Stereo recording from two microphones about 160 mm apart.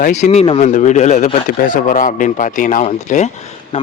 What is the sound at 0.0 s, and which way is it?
A man's voice, 45° left (ahead or behind).